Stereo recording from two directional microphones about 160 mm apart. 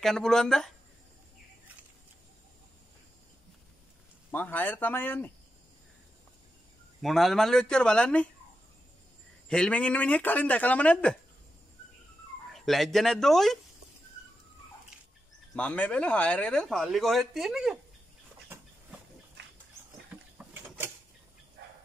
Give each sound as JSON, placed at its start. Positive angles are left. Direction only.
{"t": 0.0, "sound": "speech", "side_deg": 5}
{"t": 4.3, "sound": "speech", "side_deg": 10}
{"t": 7.0, "sound": "speech", "side_deg": 0}
{"t": 9.5, "sound": "speech", "side_deg": 5}
{"t": 12.5, "sound": "speech", "side_deg": 0}
{"t": 15.5, "sound": "speech", "side_deg": 10}
{"t": 19.4, "sound": "pig", "side_deg": -90}
{"t": 20.1, "sound": "a sound", "side_deg": -10}
{"t": 21.6, "sound": "a sound", "side_deg": -90}